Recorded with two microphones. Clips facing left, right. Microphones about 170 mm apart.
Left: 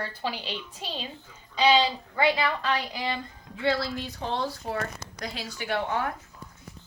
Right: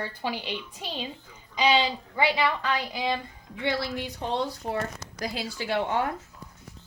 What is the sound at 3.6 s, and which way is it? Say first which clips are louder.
Speech: left 2 dB; 20° right (ahead or behind).